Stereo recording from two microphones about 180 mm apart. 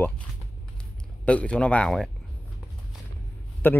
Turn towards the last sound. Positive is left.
turn(degrees=10)  # may be behind; listen again after turning